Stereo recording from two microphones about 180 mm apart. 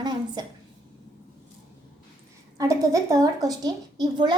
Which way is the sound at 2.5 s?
15° right (ahead or behind).